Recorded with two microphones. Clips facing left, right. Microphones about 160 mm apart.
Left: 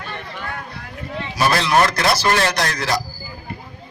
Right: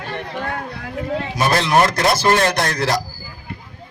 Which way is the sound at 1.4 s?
20° right (ahead or behind).